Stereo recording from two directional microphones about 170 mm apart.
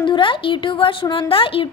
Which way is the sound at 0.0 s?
30° left (ahead or behind).